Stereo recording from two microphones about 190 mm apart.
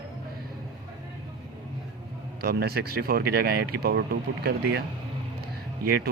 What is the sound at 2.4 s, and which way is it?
Speech, 55° right (ahead or behind).